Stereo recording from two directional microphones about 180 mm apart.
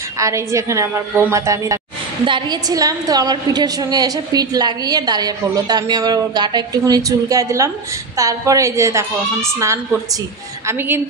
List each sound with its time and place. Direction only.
0.2 s a woman's voice: 15° right (ahead or behind)